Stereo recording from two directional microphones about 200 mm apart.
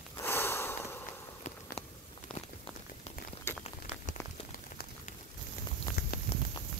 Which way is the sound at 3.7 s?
35° left (ahead or behind).